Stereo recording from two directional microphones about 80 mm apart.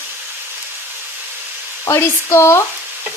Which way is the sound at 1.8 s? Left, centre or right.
Left.